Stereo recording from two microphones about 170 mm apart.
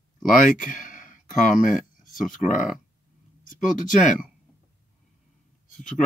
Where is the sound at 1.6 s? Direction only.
50° left (ahead or behind).